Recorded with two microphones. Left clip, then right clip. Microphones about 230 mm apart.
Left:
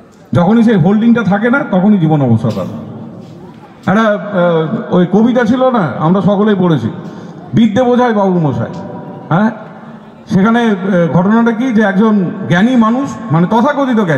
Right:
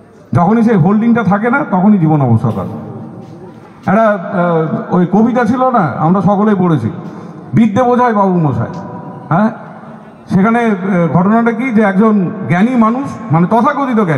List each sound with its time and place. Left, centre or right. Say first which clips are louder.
0.3 s a man's voice: even; centre
3.9 s a man's voice: right 1 dB; centre
10.3 s a man's voice: even; centre